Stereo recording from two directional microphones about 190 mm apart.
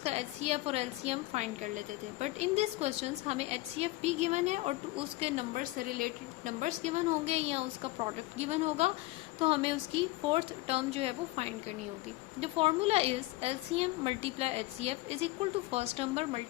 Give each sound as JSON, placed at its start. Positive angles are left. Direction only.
{"t": 0.0, "sound": "a woman's voice", "side_deg": -35}